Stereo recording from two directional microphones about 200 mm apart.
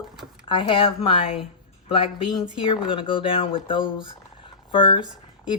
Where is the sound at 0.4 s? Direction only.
25° left (ahead or behind).